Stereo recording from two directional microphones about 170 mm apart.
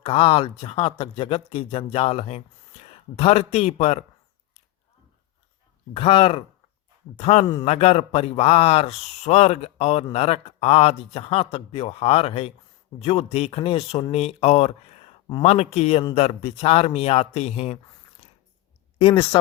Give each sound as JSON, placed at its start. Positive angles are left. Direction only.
{"t": 0.0, "sound": "a man's voice", "side_deg": 35}
{"t": 5.9, "sound": "a man's voice", "side_deg": 30}
{"t": 18.9, "sound": "a man's voice", "side_deg": 35}